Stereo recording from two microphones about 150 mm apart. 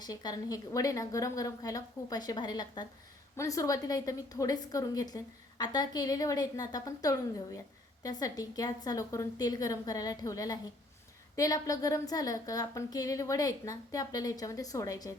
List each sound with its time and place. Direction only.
0.0 s a woman's voice: 25° left (ahead or behind)